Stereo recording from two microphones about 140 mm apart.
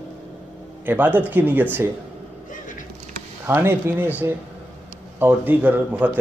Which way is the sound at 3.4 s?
15° right (ahead or behind).